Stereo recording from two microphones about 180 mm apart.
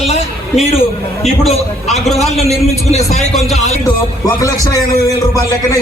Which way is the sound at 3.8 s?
20° left (ahead or behind).